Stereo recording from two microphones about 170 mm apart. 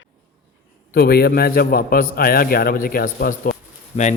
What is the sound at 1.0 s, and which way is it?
A man's voice, 65° left (ahead or behind).